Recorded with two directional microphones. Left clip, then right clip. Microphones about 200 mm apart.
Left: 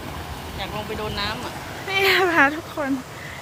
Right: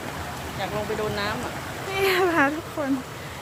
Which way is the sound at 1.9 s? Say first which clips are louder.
Left 4 dB; centre (ahead or behind).